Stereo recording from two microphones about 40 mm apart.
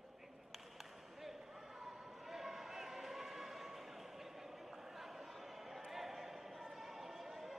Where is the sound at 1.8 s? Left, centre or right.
Centre.